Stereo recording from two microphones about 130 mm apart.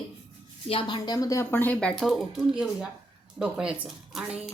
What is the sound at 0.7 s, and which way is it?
Speech, 40° left (ahead or behind).